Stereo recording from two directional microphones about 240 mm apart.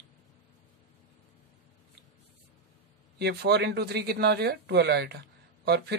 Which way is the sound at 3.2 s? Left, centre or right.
Right.